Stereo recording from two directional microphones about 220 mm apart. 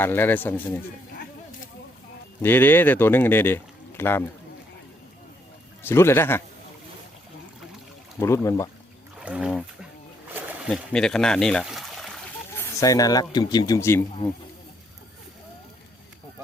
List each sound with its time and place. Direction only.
0.0 s speech: 10° left (ahead or behind)
2.4 s speech: 10° left (ahead or behind)
5.8 s speech: 10° left (ahead or behind)
8.2 s speech: 10° left (ahead or behind)
9.1 s a sound: 5° right (ahead or behind)
10.3 s speech: centre (ahead or behind)
12.5 s speech: 15° left (ahead or behind)